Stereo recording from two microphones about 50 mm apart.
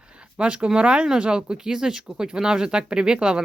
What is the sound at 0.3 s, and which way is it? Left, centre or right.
Speech, right.